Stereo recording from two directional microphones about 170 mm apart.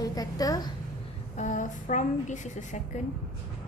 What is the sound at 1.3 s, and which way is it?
A woman's voice, 45° left (ahead or behind).